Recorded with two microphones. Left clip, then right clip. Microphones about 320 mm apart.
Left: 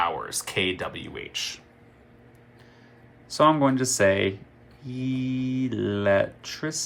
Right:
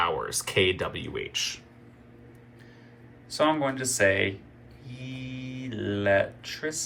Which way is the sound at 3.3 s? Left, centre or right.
Centre.